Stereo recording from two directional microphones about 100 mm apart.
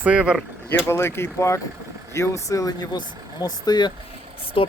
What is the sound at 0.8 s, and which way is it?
Speech, 25° left (ahead or behind).